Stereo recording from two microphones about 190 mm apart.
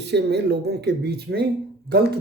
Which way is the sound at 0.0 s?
60° right (ahead or behind).